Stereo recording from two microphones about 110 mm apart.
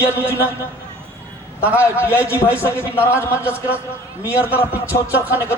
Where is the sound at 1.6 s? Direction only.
15° right (ahead or behind).